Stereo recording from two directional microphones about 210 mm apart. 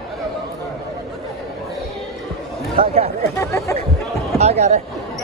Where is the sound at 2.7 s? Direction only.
25° right (ahead or behind).